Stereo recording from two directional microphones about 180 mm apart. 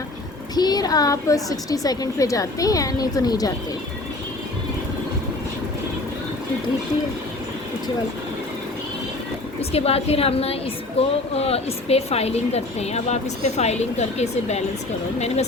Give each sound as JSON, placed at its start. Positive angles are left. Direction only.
{"t": 0.5, "sound": "a woman's voice", "side_deg": 20}
{"t": 9.6, "sound": "a woman's voice", "side_deg": 35}